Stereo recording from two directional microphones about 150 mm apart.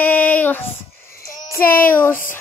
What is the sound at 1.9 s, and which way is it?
Female singing, 15° left (ahead or behind).